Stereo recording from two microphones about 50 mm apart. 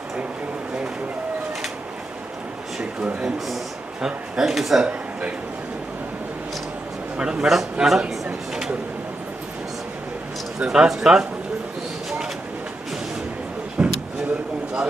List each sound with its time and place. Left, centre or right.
3.2 s speech: centre
4.8 s speech: right
7.2 s a man's voice: centre
10.6 s a man's voice: centre
13.8 s a sound: centre